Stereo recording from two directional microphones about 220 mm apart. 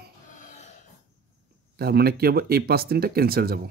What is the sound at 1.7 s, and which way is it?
Speech, 45° right (ahead or behind).